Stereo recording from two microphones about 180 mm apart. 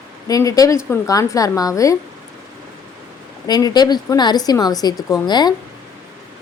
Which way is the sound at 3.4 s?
20° left (ahead or behind).